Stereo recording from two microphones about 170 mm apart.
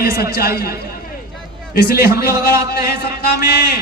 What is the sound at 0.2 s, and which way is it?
Speech, 65° left (ahead or behind).